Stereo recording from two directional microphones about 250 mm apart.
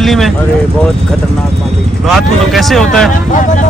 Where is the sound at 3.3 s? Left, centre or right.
Left.